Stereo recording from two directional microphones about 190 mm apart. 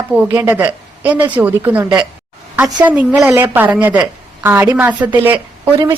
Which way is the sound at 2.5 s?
20° right (ahead or behind).